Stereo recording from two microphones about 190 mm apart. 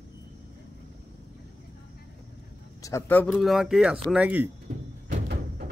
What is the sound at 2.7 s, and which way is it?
Speech, 15° left (ahead or behind).